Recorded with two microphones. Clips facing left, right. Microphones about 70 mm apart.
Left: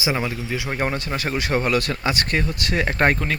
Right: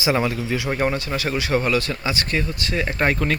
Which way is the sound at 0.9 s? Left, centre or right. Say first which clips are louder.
Right 1 dB; left.